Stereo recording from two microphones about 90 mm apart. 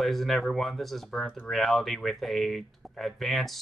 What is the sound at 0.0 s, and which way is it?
Speech, centre (ahead or behind).